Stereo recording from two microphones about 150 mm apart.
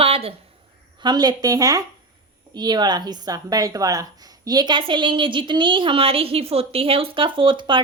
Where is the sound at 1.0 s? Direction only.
30° right (ahead or behind).